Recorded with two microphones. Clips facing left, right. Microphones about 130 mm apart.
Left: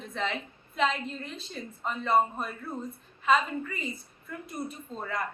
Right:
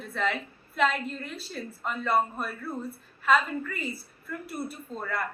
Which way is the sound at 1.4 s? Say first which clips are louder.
Even; 20° left (ahead or behind).